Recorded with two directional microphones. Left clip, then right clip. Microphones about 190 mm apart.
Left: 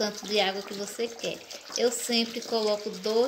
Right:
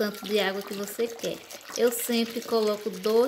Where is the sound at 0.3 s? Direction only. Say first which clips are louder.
Left 1 dB; 45° right (ahead or behind).